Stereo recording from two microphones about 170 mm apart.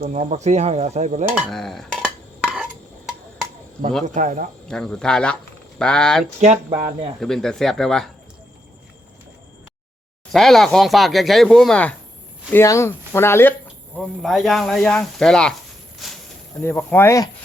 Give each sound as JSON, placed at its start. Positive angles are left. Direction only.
{"t": 0.0, "sound": "speech", "side_deg": -45}
{"t": 1.4, "sound": "stir", "side_deg": 0}
{"t": 4.0, "sound": "speech", "side_deg": -45}
{"t": 4.7, "sound": "speech", "side_deg": 5}
{"t": 6.4, "sound": "speech", "side_deg": -40}
{"t": 6.7, "sound": "speech", "side_deg": -25}
{"t": 7.2, "sound": "speech", "side_deg": 5}
{"t": 10.3, "sound": "speech", "side_deg": 0}
{"t": 13.9, "sound": "speech", "side_deg": 0}
{"t": 16.0, "sound": "a sound", "side_deg": 0}
{"t": 16.6, "sound": "speech", "side_deg": 15}